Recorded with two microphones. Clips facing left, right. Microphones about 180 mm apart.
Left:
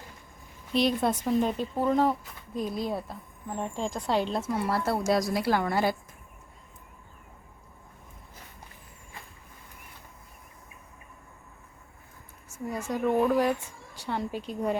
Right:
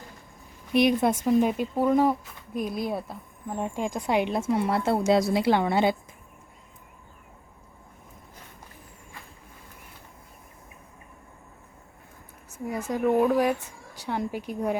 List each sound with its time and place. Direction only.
0.7 s a woman's voice: 15° right (ahead or behind)
12.6 s a sound: 5° right (ahead or behind)
13.0 s speech: 10° right (ahead or behind)